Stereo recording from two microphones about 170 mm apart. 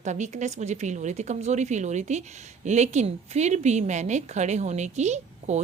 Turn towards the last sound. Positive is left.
turn(degrees=-40)  # may be behind; listen again after turning